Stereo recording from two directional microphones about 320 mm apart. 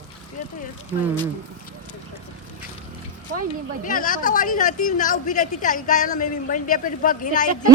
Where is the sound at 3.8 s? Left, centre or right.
Left.